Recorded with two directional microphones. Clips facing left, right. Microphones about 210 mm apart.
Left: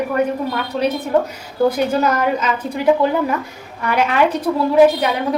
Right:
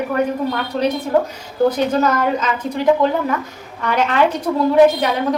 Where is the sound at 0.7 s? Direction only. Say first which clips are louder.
Even; centre (ahead or behind).